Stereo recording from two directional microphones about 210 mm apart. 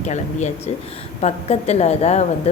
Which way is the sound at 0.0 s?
35° left (ahead or behind).